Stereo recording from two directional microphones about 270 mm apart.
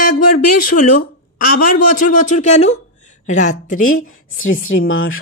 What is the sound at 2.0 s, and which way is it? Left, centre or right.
Speech, left.